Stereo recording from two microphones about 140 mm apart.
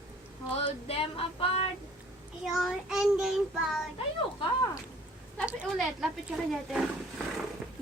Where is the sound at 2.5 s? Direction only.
Centre (ahead or behind).